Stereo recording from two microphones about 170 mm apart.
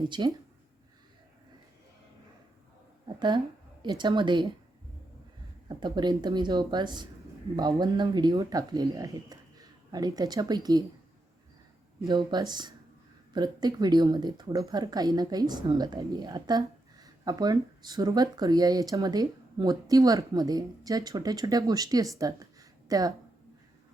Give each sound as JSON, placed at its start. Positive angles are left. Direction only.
{"t": 0.1, "sound": "speech", "side_deg": -25}
{"t": 3.2, "sound": "speech", "side_deg": -25}
{"t": 5.6, "sound": "speech", "side_deg": -25}
{"t": 12.0, "sound": "speech", "side_deg": -25}